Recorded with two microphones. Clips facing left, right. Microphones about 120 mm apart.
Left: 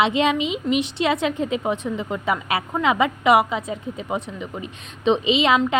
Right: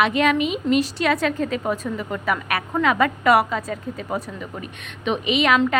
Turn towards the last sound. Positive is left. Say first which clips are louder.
# left 2 dB
turn(degrees=25)  # may be behind; listen again after turning